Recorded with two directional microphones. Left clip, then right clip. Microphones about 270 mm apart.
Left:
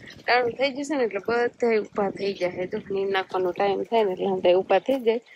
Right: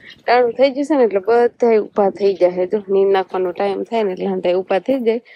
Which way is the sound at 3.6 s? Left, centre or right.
Right.